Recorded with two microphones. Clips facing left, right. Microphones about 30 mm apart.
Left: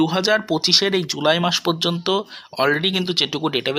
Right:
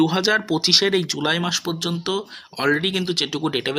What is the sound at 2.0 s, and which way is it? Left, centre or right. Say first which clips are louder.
Speech: left 4 dB; left.